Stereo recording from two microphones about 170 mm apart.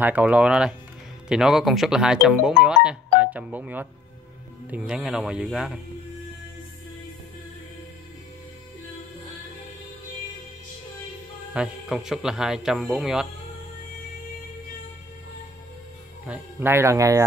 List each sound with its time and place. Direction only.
0.0 s speech: 10° right (ahead or behind)
11.5 s speech: 5° right (ahead or behind)
16.3 s speech: 10° right (ahead or behind)